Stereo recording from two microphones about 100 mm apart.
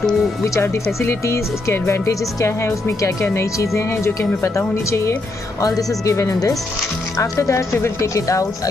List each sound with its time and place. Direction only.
1.0 s speech: 25° left (ahead or behind)